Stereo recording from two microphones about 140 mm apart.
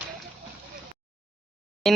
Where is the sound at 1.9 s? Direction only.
Centre (ahead or behind).